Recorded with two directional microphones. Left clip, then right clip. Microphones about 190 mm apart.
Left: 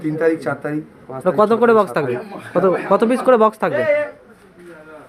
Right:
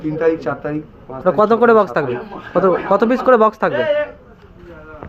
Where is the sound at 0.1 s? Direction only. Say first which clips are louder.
Right 1 dB; 20° left (ahead or behind).